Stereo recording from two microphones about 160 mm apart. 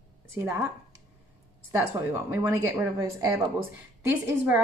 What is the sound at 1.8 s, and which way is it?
A woman's voice, 15° right (ahead or behind).